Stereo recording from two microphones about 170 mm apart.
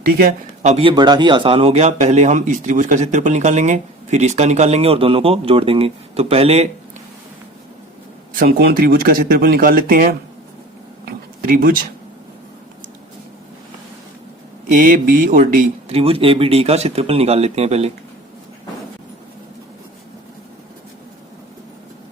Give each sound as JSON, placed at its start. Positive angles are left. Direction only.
{"t": 0.0, "sound": "speech", "side_deg": -65}
{"t": 0.6, "sound": "a man's voice", "side_deg": -35}
{"t": 8.4, "sound": "speech", "side_deg": -65}
{"t": 11.4, "sound": "speech", "side_deg": -55}
{"t": 14.7, "sound": "mantra", "side_deg": -50}
{"t": 15.9, "sound": "a man's voice", "side_deg": -35}